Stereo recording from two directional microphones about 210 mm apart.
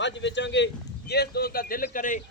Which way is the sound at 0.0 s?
60° left (ahead or behind).